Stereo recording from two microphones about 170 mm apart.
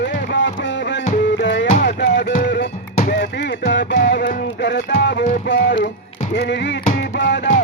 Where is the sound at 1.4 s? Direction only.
90° left.